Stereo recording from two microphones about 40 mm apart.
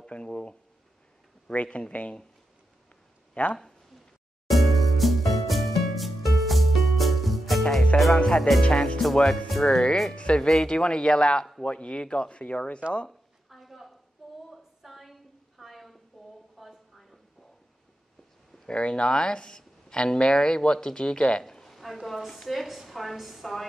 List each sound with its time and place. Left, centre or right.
0.0 s speech: left
3.4 s speech: left
4.5 s music: centre
7.9 s speech: left
8.4 s speech: centre
8.6 s speech: left
9.1 s speech: centre
10.1 s speech: left
13.5 s a sound: centre
18.7 s speech: left
21.5 s a woman's voice: centre